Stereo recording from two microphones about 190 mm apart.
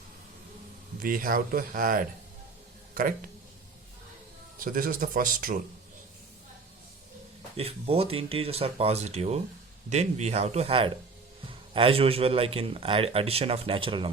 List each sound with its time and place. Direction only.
0.9 s speech: 50° right (ahead or behind)
4.6 s speech: 50° right (ahead or behind)
7.5 s a man's voice: 30° right (ahead or behind)